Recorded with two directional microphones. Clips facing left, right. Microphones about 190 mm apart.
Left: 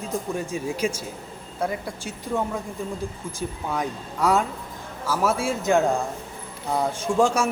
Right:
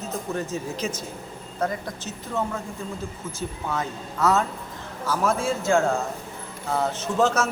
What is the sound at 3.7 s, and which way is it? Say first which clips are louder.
A man's voice: left 1 dB; 15° left (ahead or behind).